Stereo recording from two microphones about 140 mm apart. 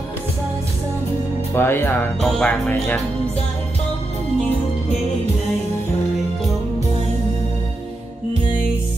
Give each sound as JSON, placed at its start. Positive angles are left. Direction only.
{"t": 1.5, "sound": "speech", "side_deg": 15}
{"t": 2.2, "sound": "music", "side_deg": 5}